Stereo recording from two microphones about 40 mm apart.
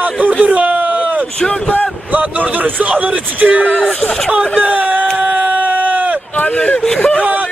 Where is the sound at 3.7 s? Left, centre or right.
Left.